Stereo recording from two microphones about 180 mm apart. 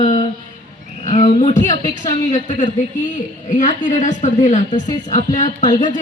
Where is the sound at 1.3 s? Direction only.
40° left (ahead or behind).